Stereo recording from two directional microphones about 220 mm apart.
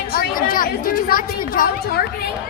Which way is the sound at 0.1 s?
40° left (ahead or behind).